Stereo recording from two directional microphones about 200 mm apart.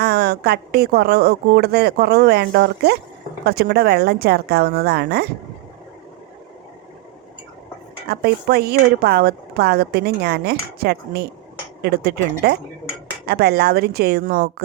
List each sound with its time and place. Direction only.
0.0 s speech: 55° right (ahead or behind)
8.0 s speech: 50° right (ahead or behind)